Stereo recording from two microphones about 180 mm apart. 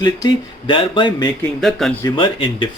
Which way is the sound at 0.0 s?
25° left (ahead or behind).